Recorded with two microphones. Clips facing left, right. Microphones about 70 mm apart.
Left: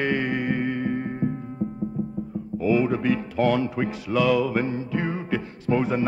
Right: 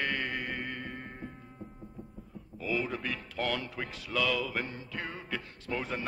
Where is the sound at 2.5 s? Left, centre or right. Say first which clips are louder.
Left 12 dB; centre.